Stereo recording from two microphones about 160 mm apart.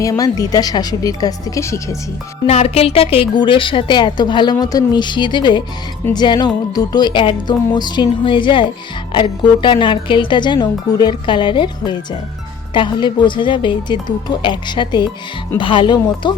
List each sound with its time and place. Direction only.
0.0 s speech: 20° left (ahead or behind)
2.5 s a woman's voice: 40° left (ahead or behind)